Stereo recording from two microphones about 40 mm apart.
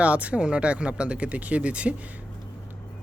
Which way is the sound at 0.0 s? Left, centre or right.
Right.